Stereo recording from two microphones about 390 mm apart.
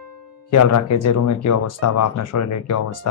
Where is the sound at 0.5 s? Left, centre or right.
Left.